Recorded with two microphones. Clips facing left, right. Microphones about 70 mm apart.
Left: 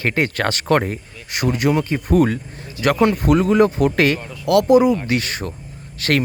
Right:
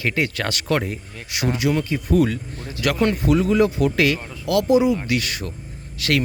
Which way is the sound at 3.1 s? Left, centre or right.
Left.